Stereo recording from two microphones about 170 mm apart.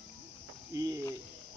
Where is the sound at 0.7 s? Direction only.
20° right (ahead or behind).